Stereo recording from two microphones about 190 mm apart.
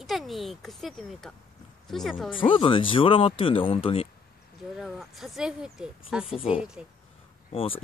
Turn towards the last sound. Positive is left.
turn(degrees=30)  # may be behind; listen again after turning